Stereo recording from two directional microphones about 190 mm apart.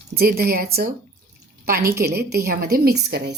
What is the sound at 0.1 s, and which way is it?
A woman's voice, 55° right (ahead or behind).